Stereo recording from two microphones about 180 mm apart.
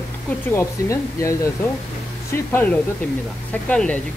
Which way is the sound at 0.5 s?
15° left (ahead or behind).